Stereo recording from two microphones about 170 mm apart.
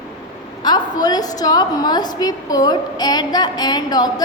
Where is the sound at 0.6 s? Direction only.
25° left (ahead or behind).